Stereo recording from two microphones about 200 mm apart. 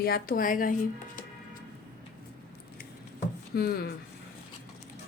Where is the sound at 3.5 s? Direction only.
50° left (ahead or behind).